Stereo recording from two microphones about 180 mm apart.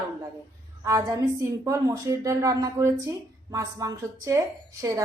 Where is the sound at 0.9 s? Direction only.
20° right (ahead or behind).